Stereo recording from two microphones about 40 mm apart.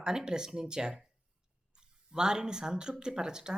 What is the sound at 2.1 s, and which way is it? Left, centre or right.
Speech, centre.